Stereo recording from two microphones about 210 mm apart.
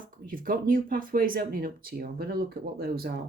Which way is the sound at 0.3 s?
40° right (ahead or behind).